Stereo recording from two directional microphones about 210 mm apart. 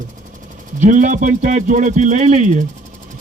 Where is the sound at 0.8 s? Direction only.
35° right (ahead or behind).